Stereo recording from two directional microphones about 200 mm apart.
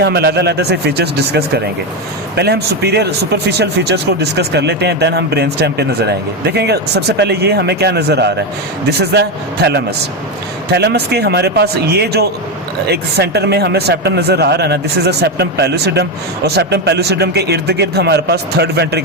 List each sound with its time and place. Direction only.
0.0 s a man's voice: 55° right (ahead or behind)
10.7 s speech: 55° right (ahead or behind)